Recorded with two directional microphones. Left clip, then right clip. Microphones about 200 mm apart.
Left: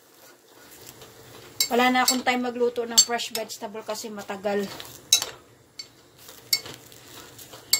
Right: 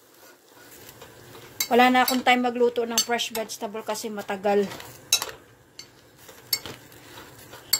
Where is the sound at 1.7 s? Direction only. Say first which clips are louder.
Right 3 dB; 20° right (ahead or behind).